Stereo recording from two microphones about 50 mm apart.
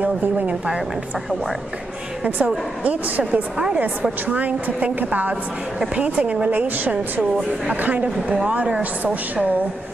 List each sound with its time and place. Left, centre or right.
0.0 s a woman's voice: right
2.2 s speech: right
3.5 s a woman's voice: centre
4.3 s a woman's voice: right
9.0 s a woman's voice: right